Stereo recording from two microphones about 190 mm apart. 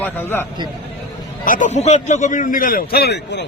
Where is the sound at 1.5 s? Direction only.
40° left (ahead or behind).